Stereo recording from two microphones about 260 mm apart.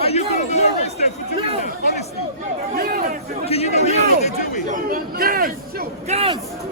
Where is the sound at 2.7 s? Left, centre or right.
Right.